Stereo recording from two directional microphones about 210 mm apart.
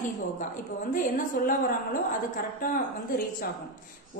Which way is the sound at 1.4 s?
50° left (ahead or behind).